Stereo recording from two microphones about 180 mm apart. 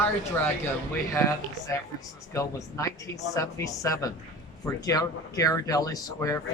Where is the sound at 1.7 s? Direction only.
15° left (ahead or behind).